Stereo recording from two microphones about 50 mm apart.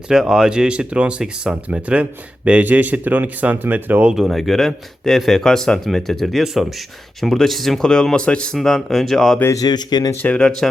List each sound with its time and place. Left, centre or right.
0.1 s speech: centre; by 4.1 s right
4.1 s speech: centre
7.9 s speech: centre
8.5 s speech: centre
10.2 s speech: left
10.6 s speech: centre